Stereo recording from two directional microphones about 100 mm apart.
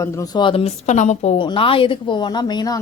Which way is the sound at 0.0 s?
30° left (ahead or behind).